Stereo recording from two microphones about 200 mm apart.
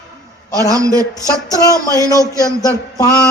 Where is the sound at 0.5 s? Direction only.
15° right (ahead or behind).